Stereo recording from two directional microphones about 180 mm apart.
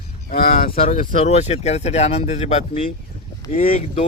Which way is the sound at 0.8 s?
35° left (ahead or behind).